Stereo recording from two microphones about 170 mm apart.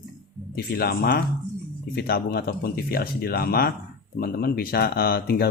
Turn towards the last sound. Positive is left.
turn(degrees=65)  # may be behind; listen again after turning